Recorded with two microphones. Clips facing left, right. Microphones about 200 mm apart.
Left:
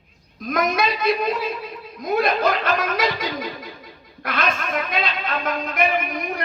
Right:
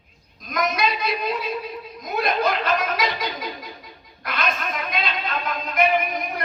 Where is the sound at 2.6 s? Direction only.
50° left (ahead or behind).